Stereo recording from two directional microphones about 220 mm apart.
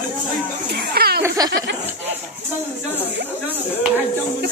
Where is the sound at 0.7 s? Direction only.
45° right (ahead or behind).